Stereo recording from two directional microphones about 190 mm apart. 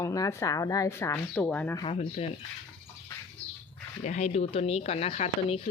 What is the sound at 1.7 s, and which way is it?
Speech, 30° left (ahead or behind).